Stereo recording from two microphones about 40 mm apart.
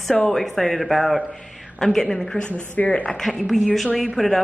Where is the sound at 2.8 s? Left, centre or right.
Left.